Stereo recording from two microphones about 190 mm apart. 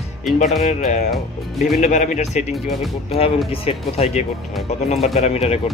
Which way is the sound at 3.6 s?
35° left (ahead or behind).